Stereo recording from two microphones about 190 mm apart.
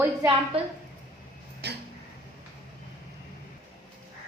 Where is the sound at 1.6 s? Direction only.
60° right (ahead or behind).